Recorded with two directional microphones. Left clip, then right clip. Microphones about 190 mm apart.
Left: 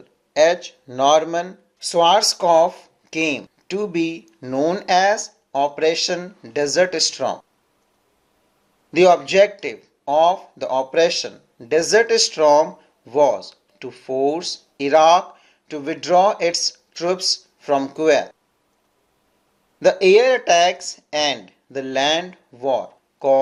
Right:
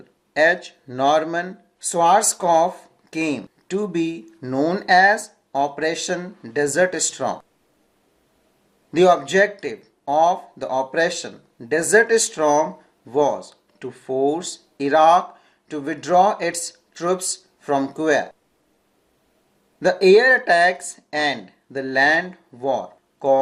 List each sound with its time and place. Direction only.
0.3 s speech: 25° left (ahead or behind)
3.8 s speech: 35° left (ahead or behind)
9.0 s speech: 35° left (ahead or behind)
17.7 s speech: 25° left (ahead or behind)
19.8 s speech: 35° left (ahead or behind)